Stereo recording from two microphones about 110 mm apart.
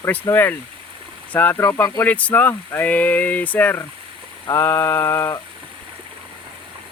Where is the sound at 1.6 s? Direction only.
20° left (ahead or behind).